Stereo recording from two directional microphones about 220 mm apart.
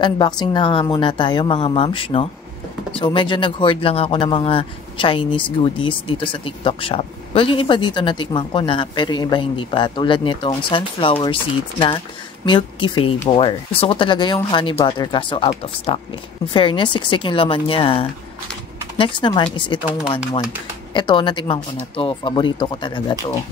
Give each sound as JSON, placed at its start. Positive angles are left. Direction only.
{"t": 0.0, "sound": "speech", "side_deg": 20}
{"t": 12.4, "sound": "speech", "side_deg": 20}
{"t": 20.9, "sound": "speech", "side_deg": 20}